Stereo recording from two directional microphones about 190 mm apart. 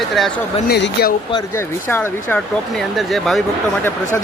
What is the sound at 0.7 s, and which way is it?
Speech, 60° left (ahead or behind).